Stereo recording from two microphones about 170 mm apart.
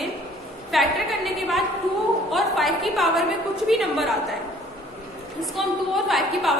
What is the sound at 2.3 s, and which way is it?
A woman's voice, centre (ahead or behind).